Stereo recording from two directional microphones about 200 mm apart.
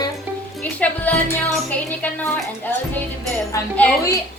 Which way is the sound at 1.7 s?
10° left (ahead or behind).